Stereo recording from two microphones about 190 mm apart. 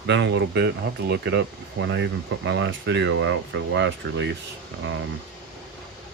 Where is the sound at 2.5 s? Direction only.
75° right (ahead or behind).